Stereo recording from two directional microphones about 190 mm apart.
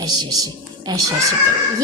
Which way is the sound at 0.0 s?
20° right (ahead or behind).